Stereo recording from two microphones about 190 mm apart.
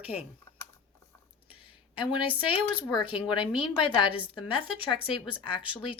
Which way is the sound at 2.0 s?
25° left (ahead or behind).